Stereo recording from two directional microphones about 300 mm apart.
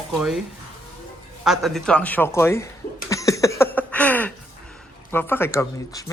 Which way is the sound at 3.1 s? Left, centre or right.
Centre.